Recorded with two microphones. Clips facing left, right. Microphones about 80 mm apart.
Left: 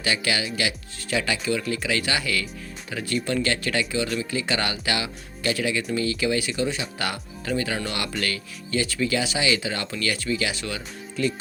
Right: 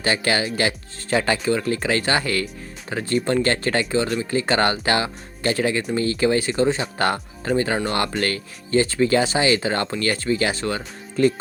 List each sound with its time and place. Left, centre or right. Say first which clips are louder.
0.0 s speech: right 4 dB; right